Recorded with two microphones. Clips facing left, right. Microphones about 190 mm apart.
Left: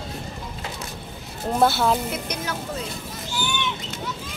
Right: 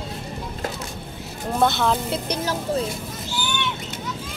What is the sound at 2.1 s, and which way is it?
Speech, 30° right (ahead or behind).